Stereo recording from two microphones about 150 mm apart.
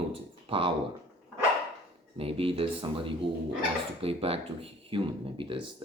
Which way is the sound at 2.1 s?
40° right (ahead or behind).